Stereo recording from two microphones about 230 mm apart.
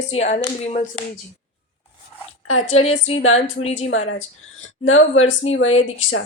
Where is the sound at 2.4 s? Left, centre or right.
Left.